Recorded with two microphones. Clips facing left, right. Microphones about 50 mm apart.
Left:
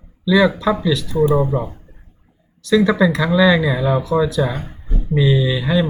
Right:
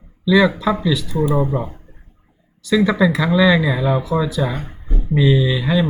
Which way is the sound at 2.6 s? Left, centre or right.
Centre.